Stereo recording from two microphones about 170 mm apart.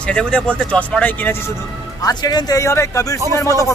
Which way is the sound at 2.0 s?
20° left (ahead or behind).